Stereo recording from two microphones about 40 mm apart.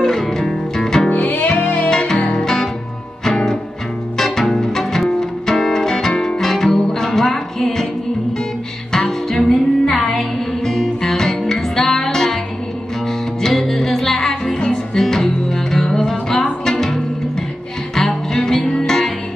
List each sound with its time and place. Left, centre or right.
0.0 s music: centre
1.6 s music: left
1.9 s music: centre
13.5 s music: centre